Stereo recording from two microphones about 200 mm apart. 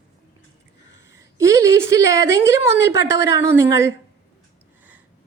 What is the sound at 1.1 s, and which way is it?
A woman's voice, 15° right (ahead or behind).